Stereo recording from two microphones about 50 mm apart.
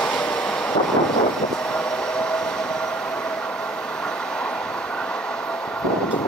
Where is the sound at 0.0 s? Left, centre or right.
Left.